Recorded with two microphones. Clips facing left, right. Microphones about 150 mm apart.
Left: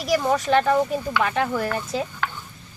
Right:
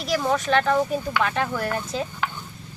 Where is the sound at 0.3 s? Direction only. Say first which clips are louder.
Even; 15° left (ahead or behind).